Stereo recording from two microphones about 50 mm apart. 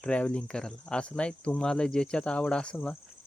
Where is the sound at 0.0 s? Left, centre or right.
Left.